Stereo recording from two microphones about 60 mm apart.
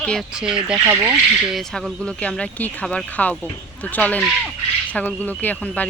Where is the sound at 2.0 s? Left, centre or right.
Centre.